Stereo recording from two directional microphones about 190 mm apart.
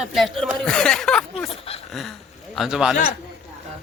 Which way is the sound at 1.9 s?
Centre (ahead or behind).